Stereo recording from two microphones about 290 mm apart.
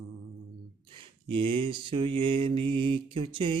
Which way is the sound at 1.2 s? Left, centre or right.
Centre.